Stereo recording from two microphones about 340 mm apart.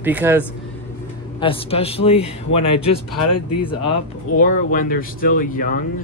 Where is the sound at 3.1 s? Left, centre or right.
Left.